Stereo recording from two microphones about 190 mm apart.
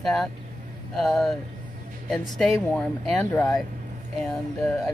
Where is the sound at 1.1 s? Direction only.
Centre (ahead or behind).